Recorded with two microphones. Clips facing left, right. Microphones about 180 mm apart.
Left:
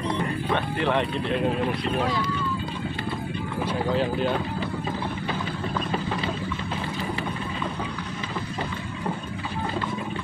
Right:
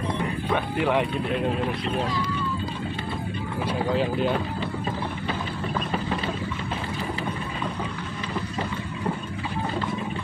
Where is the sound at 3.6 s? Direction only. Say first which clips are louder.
Even; centre (ahead or behind).